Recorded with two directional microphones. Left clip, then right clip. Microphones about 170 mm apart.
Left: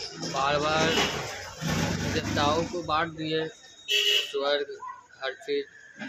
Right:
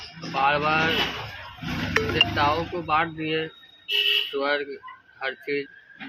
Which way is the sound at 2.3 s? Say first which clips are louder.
Right 3 dB; 25° left (ahead or behind).